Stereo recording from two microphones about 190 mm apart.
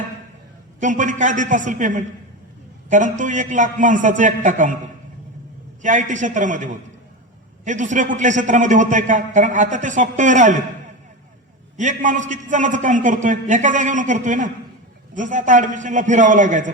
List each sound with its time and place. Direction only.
0.8 s a man's voice: 40° right (ahead or behind)
5.8 s a man's voice: 40° right (ahead or behind)
11.8 s a man's voice: 40° right (ahead or behind)